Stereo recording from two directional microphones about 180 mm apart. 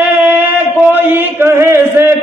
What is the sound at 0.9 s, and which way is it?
Chant, 10° right (ahead or behind).